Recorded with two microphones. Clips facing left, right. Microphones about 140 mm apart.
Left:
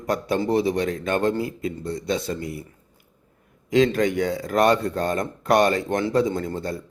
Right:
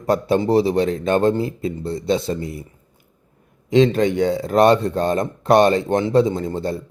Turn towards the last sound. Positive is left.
turn(degrees=-25)  # may be behind; listen again after turning